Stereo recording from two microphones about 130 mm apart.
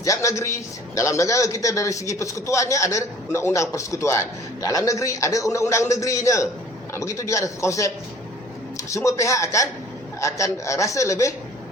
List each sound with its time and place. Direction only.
0.0 s a man's voice: 25° left (ahead or behind)